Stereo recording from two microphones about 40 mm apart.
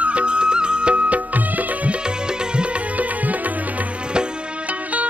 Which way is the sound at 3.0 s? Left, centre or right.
Right.